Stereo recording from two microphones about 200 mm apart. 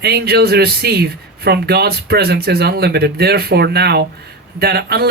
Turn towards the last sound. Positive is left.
turn(degrees=-50)  # may be behind; listen again after turning